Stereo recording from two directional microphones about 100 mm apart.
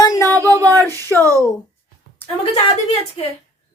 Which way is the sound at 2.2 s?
20° left (ahead or behind).